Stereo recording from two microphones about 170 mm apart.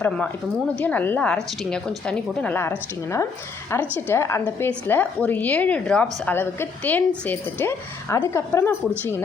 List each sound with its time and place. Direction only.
0.8 s speech: 10° left (ahead or behind)